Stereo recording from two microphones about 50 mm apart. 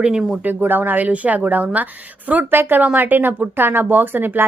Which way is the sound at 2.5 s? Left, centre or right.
Right.